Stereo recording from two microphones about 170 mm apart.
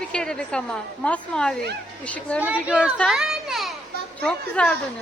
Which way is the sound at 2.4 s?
5° right (ahead or behind).